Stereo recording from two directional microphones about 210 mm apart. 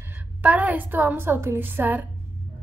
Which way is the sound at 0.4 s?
5° right (ahead or behind).